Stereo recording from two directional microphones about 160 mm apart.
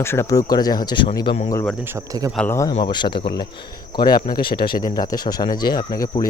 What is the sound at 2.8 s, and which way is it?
Speech, 30° left (ahead or behind).